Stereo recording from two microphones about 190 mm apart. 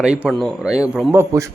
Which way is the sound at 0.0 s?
5° right (ahead or behind).